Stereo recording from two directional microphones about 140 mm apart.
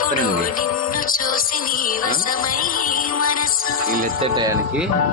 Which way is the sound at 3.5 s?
90° left.